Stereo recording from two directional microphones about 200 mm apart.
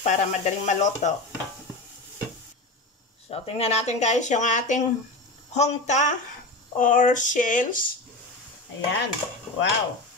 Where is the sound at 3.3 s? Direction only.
30° left (ahead or behind).